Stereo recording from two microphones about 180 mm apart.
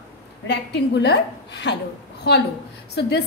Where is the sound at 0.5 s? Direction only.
70° left (ahead or behind).